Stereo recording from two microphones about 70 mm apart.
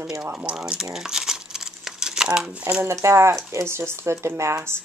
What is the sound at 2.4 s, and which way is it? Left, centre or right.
Speech, centre.